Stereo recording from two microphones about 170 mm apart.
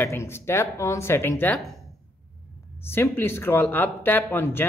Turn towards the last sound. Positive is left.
turn(degrees=15)  # may be behind; listen again after turning